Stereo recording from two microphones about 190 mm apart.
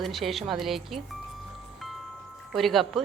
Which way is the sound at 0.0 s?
Centre (ahead or behind).